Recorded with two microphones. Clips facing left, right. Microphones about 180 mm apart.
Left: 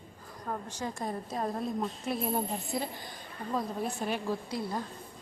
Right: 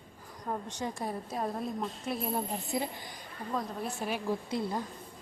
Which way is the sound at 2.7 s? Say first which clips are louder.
Right 1 dB; 20° right (ahead or behind).